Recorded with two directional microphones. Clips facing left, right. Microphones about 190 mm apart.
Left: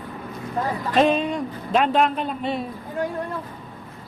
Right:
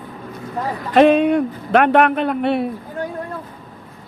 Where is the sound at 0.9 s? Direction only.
65° right (ahead or behind).